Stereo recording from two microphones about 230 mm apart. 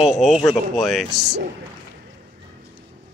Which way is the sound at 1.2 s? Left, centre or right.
Right.